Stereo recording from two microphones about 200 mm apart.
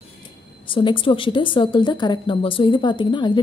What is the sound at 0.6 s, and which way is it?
A woman's voice, 25° left (ahead or behind).